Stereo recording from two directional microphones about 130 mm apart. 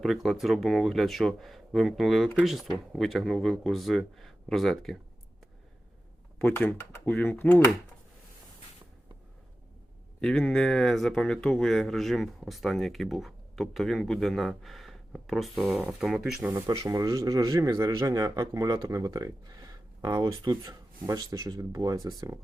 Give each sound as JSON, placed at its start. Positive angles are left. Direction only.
{"t": 0.0, "sound": "speech", "side_deg": 0}
{"t": 6.4, "sound": "speech", "side_deg": 10}
{"t": 10.2, "sound": "speech", "side_deg": 5}
{"t": 16.8, "sound": "speech", "side_deg": -25}